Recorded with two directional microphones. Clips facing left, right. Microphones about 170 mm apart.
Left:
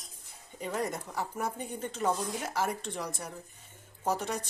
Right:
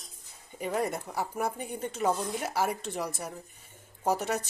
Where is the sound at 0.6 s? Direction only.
10° right (ahead or behind).